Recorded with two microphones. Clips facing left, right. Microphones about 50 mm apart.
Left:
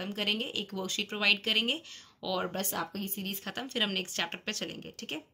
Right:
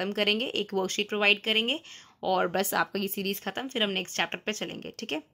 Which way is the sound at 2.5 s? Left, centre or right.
Right.